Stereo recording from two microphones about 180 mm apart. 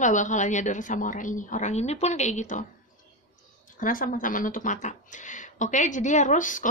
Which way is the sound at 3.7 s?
50° left (ahead or behind).